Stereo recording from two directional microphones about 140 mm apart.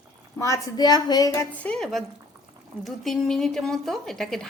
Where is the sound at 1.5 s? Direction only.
10° left (ahead or behind).